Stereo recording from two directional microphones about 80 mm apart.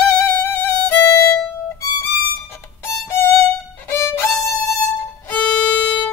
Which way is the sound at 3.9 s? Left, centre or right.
Left.